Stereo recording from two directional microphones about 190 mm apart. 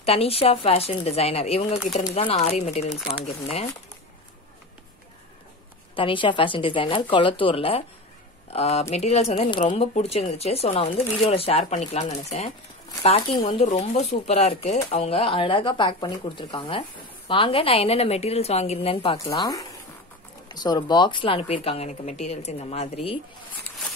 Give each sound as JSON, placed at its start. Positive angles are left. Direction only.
{"t": 0.0, "sound": "speech", "side_deg": 30}
{"t": 5.9, "sound": "speech", "side_deg": 25}
{"t": 19.1, "sound": "speech", "side_deg": 20}